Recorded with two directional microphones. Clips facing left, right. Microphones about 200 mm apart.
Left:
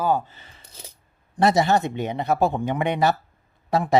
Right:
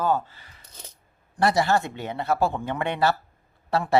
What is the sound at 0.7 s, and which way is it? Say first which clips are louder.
Coin: left 1 dB; 10° left (ahead or behind).